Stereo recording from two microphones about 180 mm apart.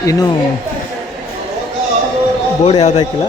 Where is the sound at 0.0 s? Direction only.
20° left (ahead or behind).